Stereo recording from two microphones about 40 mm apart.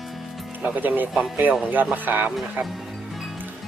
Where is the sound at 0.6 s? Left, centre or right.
Right.